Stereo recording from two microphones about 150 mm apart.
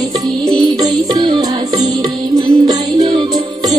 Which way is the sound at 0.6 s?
25° right (ahead or behind).